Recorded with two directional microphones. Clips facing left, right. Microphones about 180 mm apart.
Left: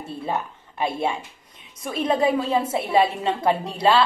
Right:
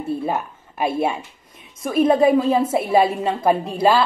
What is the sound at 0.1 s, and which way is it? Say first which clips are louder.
A woman's voice: right 4 dB; 20° right (ahead or behind).